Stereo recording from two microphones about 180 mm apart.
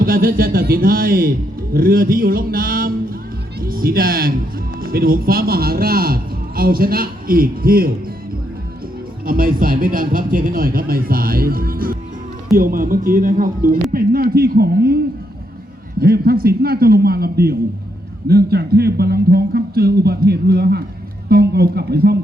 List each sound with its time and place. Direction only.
0.0 s a man's voice: 55° right (ahead or behind)
9.2 s a man's voice: 50° right (ahead or behind)